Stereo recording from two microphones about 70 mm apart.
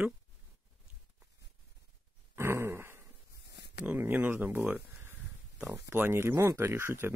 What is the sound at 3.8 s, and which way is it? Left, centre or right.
Speech, right.